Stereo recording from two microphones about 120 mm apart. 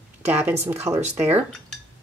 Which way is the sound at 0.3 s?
15° right (ahead or behind).